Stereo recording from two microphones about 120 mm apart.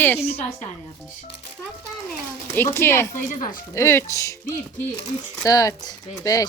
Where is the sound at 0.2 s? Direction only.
55° left (ahead or behind).